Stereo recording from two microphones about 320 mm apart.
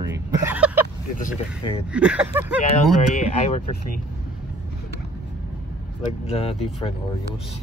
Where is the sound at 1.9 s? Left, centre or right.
Centre.